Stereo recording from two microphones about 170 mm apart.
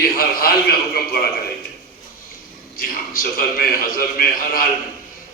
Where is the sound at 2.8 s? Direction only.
60° left (ahead or behind).